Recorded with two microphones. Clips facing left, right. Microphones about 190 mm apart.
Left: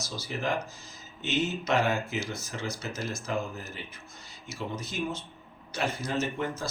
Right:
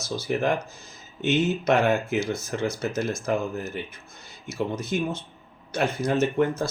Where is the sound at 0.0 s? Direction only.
55° right (ahead or behind).